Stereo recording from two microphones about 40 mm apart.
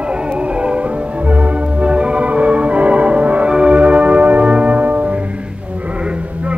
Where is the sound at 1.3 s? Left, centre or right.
Right.